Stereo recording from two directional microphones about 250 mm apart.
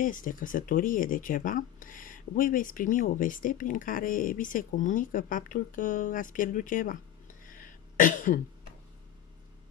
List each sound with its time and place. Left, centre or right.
0.0 s speech: left